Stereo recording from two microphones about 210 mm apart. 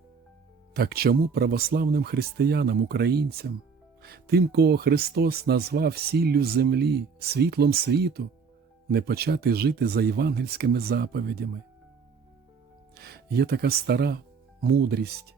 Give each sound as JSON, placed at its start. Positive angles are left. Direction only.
{"t": 0.7, "sound": "speech", "side_deg": -45}
{"t": 12.9, "sound": "speech", "side_deg": -50}